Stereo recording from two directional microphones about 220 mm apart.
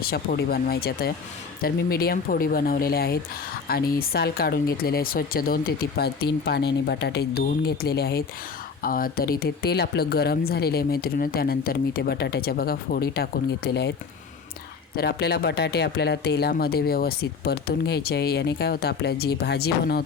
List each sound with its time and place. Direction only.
0.0 s speech: 45° left (ahead or behind)
14.9 s speech: 45° left (ahead or behind)